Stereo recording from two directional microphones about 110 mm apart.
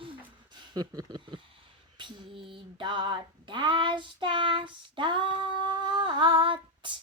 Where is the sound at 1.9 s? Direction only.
45° right (ahead or behind).